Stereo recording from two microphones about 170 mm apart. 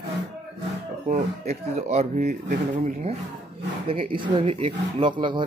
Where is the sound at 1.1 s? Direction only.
40° right (ahead or behind).